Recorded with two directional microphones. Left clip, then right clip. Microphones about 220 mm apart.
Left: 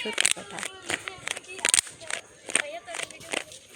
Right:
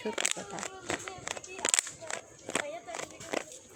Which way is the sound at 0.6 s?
15° right (ahead or behind).